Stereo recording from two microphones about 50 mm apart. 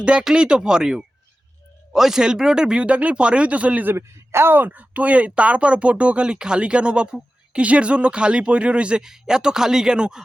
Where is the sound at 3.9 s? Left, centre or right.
Right; by 10.2 s centre.